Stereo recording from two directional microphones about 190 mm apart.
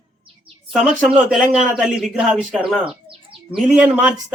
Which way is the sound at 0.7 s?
Centre (ahead or behind).